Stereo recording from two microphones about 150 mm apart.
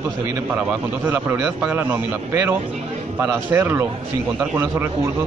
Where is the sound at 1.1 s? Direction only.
15° right (ahead or behind).